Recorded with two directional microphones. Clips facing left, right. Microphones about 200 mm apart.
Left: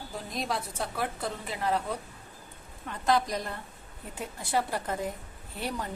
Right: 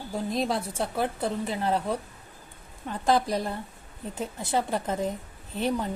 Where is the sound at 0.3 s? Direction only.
30° right (ahead or behind).